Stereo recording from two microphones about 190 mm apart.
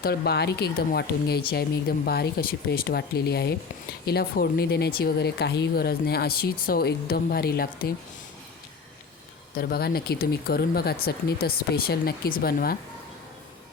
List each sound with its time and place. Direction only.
0.0 s speech: 55° left (ahead or behind)
9.6 s speech: 55° left (ahead or behind)